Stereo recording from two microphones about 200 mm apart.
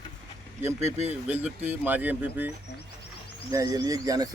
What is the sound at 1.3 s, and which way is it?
Speech, 10° right (ahead or behind).